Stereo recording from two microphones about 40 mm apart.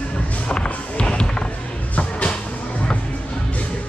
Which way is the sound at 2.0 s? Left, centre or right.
Left.